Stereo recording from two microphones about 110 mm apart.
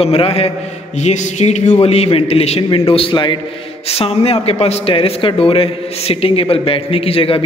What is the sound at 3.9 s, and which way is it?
Speech, 65° left (ahead or behind).